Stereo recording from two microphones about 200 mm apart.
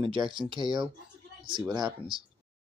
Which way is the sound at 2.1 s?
25° right (ahead or behind).